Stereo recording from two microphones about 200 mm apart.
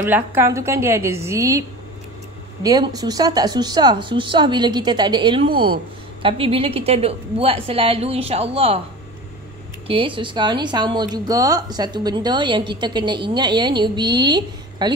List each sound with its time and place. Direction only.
0.0 s a woman's voice: 10° right (ahead or behind)
2.6 s speech: 20° right (ahead or behind)
9.8 s speech: 25° right (ahead or behind)